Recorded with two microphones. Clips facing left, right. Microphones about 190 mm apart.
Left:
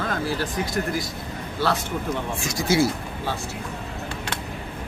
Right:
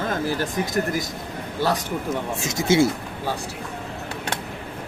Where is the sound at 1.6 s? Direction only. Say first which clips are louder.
Right 1 dB; 15° right (ahead or behind).